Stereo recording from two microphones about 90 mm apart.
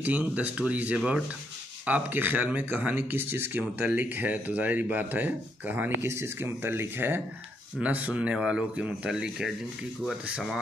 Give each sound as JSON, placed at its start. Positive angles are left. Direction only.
{"t": 0.0, "sound": "speech", "side_deg": -15}